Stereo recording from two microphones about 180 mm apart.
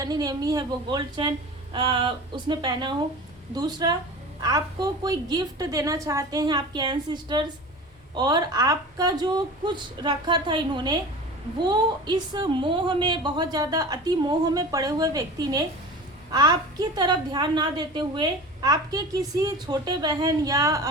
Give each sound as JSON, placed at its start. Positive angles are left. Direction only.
{"t": 0.0, "sound": "a woman's voice", "side_deg": -20}